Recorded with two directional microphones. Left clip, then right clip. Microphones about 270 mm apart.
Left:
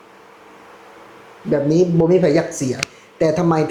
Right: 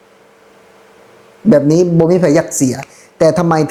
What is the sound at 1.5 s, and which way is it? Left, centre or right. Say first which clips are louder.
Speech: right 6 dB; right.